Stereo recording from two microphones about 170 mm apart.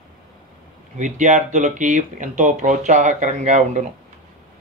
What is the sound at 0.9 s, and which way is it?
Speech, 45° right (ahead or behind).